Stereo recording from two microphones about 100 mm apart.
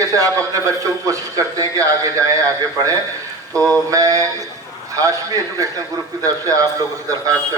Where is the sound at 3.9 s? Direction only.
35° right (ahead or behind).